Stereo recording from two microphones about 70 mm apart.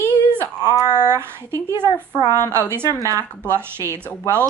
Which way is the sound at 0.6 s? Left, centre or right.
Left.